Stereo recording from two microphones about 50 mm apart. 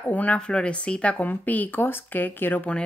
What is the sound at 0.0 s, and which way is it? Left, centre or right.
Speech, left.